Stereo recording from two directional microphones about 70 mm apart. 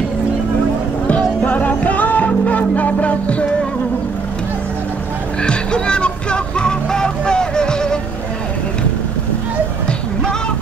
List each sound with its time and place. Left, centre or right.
1.0 s music: left
5.4 s music: centre